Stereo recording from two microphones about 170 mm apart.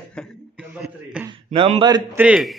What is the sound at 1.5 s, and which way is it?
Speech, 35° right (ahead or behind).